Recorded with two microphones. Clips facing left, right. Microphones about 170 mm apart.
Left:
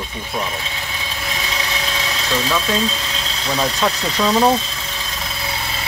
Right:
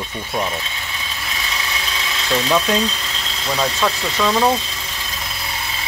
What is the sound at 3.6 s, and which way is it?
Speech, 15° left (ahead or behind).